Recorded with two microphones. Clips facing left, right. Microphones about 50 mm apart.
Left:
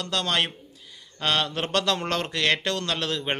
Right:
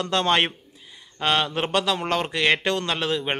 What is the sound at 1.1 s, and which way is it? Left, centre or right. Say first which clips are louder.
A man's voice: right 3 dB; centre.